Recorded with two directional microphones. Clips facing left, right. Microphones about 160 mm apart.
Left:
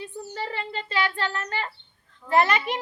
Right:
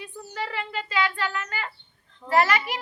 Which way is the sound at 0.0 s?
30° left (ahead or behind).